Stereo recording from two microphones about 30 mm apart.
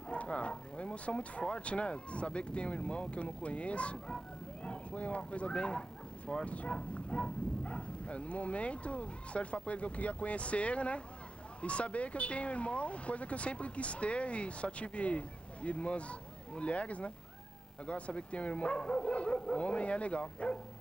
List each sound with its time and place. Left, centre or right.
0.1 s a sound: left
1.4 s speech: left
6.4 s speech: left